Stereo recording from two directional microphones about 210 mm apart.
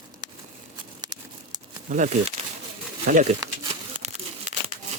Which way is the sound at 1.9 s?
35° right (ahead or behind).